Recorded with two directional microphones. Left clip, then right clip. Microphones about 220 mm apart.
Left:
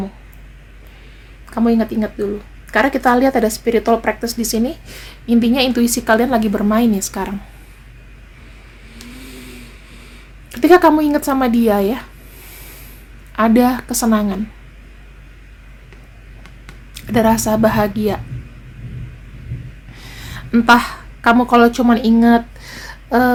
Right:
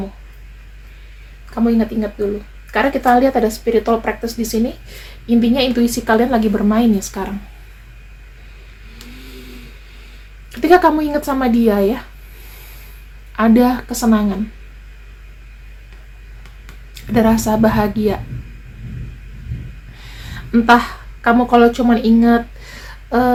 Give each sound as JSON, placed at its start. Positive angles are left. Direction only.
{"t": 1.6, "sound": "speech", "side_deg": 50}
{"t": 10.5, "sound": "speech", "side_deg": 35}
{"t": 13.3, "sound": "speech", "side_deg": 35}
{"t": 16.9, "sound": "speech", "side_deg": 35}
{"t": 20.1, "sound": "a sound", "side_deg": 35}